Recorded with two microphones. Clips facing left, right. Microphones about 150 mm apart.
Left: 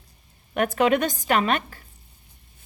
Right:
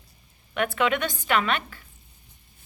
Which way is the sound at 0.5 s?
40° left (ahead or behind).